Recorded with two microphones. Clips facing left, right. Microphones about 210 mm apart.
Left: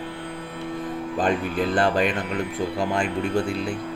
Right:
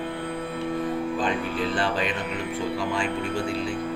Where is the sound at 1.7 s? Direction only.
50° left (ahead or behind).